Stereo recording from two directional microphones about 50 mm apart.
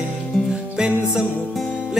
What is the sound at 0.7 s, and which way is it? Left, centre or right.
Music, centre.